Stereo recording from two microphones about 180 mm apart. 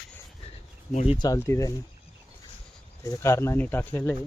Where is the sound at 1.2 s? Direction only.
15° left (ahead or behind).